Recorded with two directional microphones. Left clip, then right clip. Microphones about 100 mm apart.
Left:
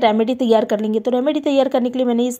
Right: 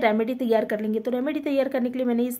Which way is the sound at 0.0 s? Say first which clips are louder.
Left 7 dB; 45° left (ahead or behind).